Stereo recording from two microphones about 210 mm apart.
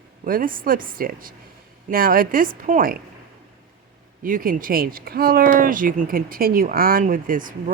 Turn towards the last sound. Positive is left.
turn(degrees=-40)  # may be behind; listen again after turning